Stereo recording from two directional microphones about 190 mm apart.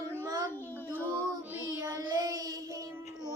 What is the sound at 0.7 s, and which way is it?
Female singing, 10° left (ahead or behind).